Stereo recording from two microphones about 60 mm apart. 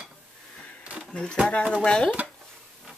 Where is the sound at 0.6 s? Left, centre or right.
Left.